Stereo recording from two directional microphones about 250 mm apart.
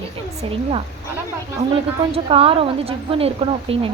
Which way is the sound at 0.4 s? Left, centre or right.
Right.